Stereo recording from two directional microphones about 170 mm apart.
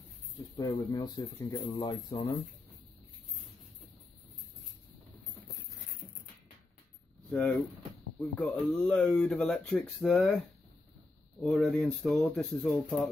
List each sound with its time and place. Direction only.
0.6 s speech: 20° left (ahead or behind)
7.2 s speech: 5° left (ahead or behind)
11.4 s speech: centre (ahead or behind)